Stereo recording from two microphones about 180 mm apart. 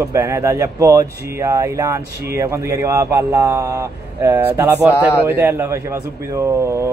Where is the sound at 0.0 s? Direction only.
15° right (ahead or behind).